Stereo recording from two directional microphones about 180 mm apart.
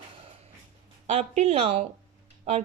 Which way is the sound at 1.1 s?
35° right (ahead or behind).